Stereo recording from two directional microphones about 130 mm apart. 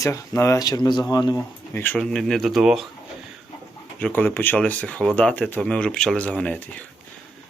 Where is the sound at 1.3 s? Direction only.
15° left (ahead or behind).